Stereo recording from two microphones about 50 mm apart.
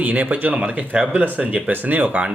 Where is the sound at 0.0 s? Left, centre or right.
Right.